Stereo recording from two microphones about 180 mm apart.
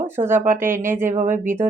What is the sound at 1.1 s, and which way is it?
Speech, 45° right (ahead or behind).